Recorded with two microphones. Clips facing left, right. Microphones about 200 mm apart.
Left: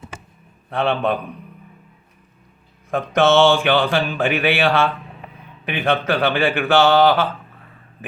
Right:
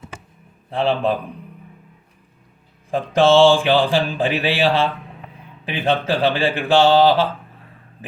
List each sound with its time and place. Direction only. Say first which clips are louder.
0.7 s speech: right 1 dB; 30° right (ahead or behind)
2.9 s speech: right 1 dB; 30° right (ahead or behind)